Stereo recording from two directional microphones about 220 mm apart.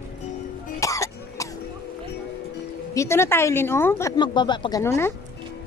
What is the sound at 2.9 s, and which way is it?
A woman's voice, 10° left (ahead or behind).